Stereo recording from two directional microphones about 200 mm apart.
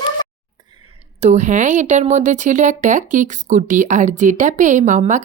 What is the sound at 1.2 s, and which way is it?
Speech, 35° right (ahead or behind).